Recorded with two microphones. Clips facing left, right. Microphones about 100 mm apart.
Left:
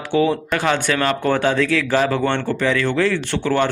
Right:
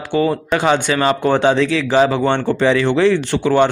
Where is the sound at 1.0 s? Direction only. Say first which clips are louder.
Right 5 dB; 20° right (ahead or behind).